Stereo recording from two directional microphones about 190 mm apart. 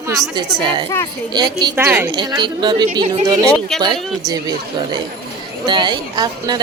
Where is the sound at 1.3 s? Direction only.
20° right (ahead or behind).